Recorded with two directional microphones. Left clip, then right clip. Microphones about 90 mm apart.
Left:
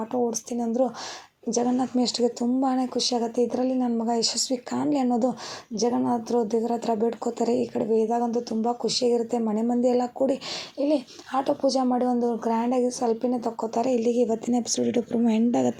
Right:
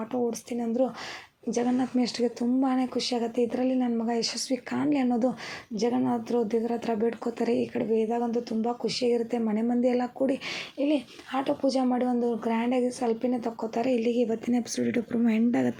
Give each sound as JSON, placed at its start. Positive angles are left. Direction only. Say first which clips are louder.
{"t": 0.1, "sound": "speech", "louder": "left 2 dB", "side_deg": 45}
{"t": 1.5, "sound": "a woman's voice", "louder": "left 3 dB", "side_deg": 35}
{"t": 9.8, "sound": "speech", "louder": "left 4 dB", "side_deg": 30}
{"t": 10.8, "sound": "speech", "louder": "left 3 dB", "side_deg": 40}